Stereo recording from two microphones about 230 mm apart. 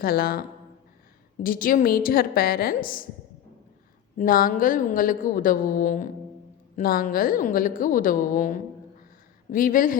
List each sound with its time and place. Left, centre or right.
0.0 s a woman's voice: left
4.2 s a woman's voice: left